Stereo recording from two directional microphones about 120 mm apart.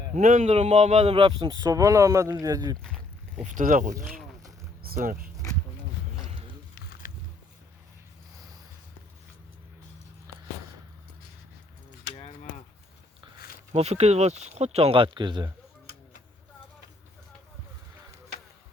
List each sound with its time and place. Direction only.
0.1 s speech: 75° right (ahead or behind); by 1.3 s 55° right (ahead or behind)
1.4 s speech: 35° right (ahead or behind)
2.8 s a sound: 5° left (ahead or behind)
3.4 s speech: 90° right
7.0 s a sound: 90° left
13.7 s speech: 60° right (ahead or behind); by 15.5 s 40° right (ahead or behind)